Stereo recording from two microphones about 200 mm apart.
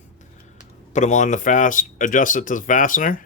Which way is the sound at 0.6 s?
35° left (ahead or behind).